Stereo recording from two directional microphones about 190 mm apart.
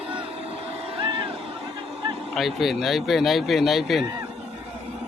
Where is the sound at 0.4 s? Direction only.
30° right (ahead or behind).